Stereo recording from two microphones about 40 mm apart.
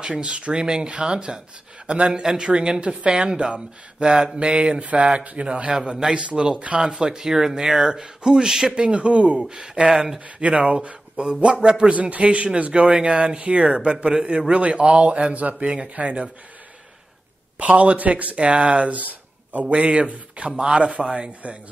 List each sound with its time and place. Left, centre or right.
0.0 s speech: centre
0.3 s speech: right
6.1 s speech: right
6.9 s speech: right
8.9 s speech: right
9.5 s speech: centre
10.2 s speech: right
11.9 s speech: right
17.6 s speech: right
19.7 s speech: right
21.3 s speech: right